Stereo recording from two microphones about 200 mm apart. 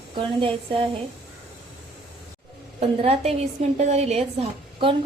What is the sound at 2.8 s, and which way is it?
A woman's voice, 30° right (ahead or behind).